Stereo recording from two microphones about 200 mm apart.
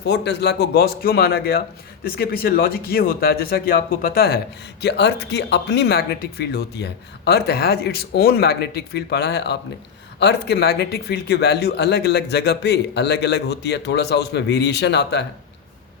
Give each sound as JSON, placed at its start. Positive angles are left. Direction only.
{"t": 0.0, "sound": "speech", "side_deg": 60}